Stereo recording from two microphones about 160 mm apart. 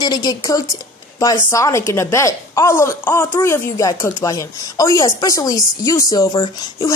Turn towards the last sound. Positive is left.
turn(degrees=25)  # may be behind; listen again after turning